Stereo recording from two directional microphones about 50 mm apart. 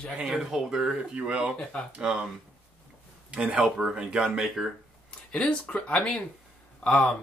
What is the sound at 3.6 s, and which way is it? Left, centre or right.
Speech, centre.